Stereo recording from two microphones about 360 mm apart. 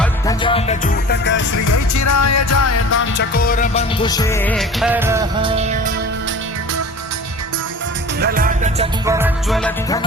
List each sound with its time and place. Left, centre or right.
0.0 s music: centre
1.1 s music: left
1.6 s music: left; by 5.9 s centre
8.2 s music: right
9.0 s music: centre